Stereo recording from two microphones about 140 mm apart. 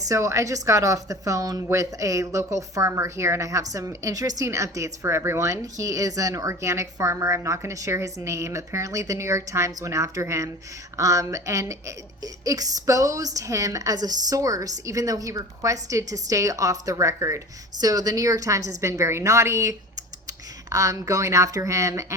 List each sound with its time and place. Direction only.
0.0 s a woman's voice: 20° right (ahead or behind)